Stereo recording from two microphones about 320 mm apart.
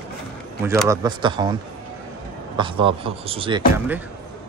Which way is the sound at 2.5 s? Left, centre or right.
Centre.